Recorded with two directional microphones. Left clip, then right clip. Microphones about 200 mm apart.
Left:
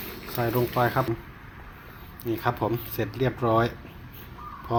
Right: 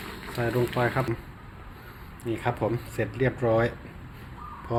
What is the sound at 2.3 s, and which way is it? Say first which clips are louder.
Speech: left 1 dB; 10° left (ahead or behind).